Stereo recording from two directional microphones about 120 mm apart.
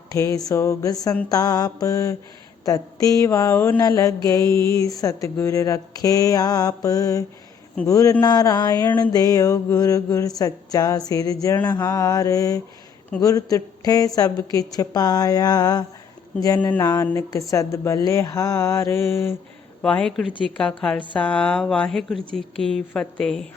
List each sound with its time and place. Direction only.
0.1 s a woman's voice: 25° left (ahead or behind)
19.8 s a woman's voice: 5° left (ahead or behind)